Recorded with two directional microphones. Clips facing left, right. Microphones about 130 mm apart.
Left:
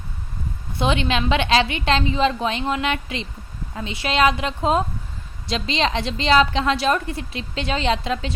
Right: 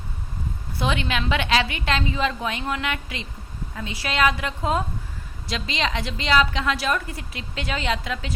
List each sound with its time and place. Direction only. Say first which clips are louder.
0.8 s a woman's voice: left 4 dB; 25° left (ahead or behind)